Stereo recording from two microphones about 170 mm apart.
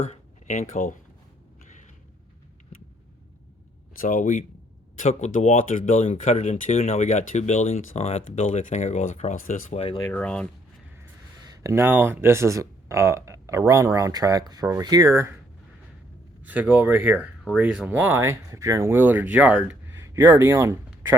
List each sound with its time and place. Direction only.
0.0 s speech: 45° left (ahead or behind)
4.0 s speech: 50° left (ahead or behind)
10.0 s speech: 10° left (ahead or behind)
11.4 s speech: 20° right (ahead or behind)
16.5 s speech: 10° right (ahead or behind)